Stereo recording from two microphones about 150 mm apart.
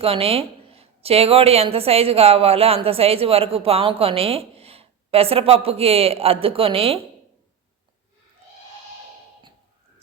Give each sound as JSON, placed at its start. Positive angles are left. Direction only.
{"t": 0.0, "sound": "speech", "side_deg": -40}